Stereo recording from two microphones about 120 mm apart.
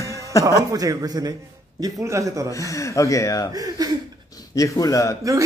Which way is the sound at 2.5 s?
25° left (ahead or behind).